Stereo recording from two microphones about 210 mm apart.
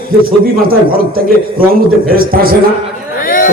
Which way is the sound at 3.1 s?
40° left (ahead or behind).